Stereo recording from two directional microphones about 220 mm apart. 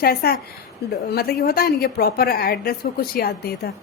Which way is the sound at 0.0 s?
45° left (ahead or behind).